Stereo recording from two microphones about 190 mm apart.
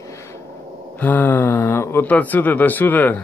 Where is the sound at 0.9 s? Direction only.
10° left (ahead or behind).